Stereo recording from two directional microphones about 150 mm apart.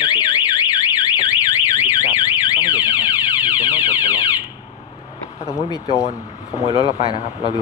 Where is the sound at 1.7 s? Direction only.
20° left (ahead or behind).